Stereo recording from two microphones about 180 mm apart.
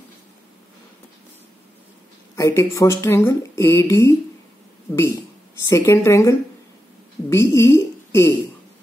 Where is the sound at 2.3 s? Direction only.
15° left (ahead or behind).